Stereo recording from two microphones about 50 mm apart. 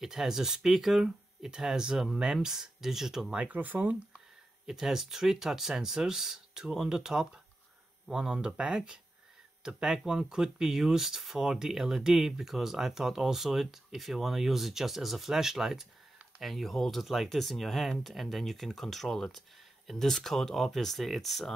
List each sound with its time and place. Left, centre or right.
0.0 s speech: centre
3.3 s speech: right
4.7 s speech: centre